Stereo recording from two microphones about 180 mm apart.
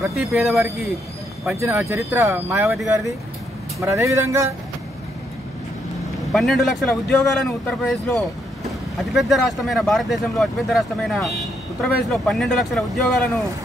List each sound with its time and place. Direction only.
0.2 s speech: centre (ahead or behind)
1.6 s speech: 15° right (ahead or behind)
3.8 s speech: 15° right (ahead or behind)
6.3 s speech: centre (ahead or behind)